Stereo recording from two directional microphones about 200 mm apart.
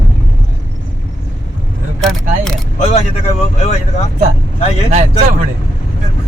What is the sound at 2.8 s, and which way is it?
Speech, 30° left (ahead or behind).